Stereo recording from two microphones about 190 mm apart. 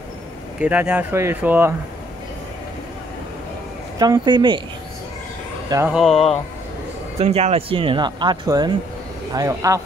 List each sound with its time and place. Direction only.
0.6 s speech: 5° right (ahead or behind)
4.0 s speech: 20° right (ahead or behind)
5.9 s speech: centre (ahead or behind)
7.2 s speech: 35° right (ahead or behind); by 9.8 s 15° right (ahead or behind)